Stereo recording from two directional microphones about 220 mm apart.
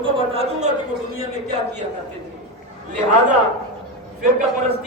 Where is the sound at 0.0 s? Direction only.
25° right (ahead or behind).